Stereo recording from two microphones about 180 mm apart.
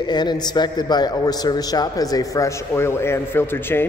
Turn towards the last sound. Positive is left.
turn(degrees=10)  # may be behind; listen again after turning